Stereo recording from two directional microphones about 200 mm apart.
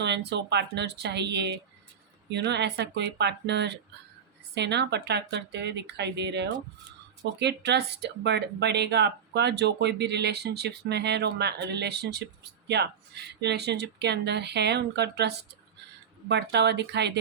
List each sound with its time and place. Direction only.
0.0 s speech: 60° right (ahead or behind)